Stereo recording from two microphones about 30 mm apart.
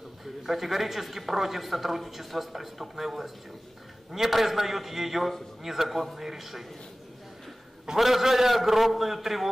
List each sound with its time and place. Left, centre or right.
0.4 s speech: centre
8.0 s a man's voice: centre